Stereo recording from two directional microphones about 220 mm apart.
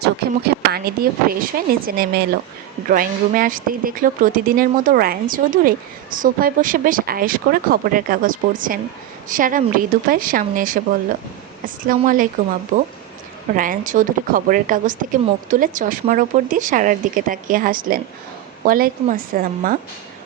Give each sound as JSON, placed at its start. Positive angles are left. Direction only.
{"t": 0.0, "sound": "speech", "side_deg": -45}